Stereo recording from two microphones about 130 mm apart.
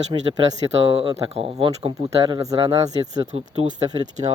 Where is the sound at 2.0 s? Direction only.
35° right (ahead or behind).